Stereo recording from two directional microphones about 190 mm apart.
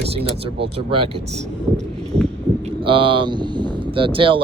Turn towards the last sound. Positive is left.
turn(degrees=-25)  # may be behind; listen again after turning